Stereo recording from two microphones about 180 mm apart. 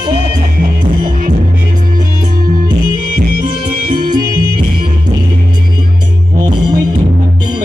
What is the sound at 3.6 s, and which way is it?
Music, 25° right (ahead or behind).